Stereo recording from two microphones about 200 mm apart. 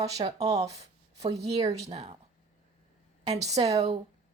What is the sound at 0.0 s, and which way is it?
A woman's voice, 30° right (ahead or behind).